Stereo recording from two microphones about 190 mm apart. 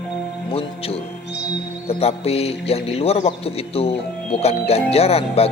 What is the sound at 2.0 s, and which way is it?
Speech, 30° left (ahead or behind).